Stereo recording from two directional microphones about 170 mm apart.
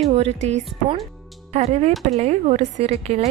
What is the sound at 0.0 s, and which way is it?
A woman's voice, 40° right (ahead or behind).